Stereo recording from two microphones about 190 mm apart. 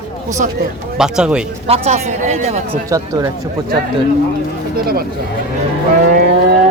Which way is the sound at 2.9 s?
15° right (ahead or behind).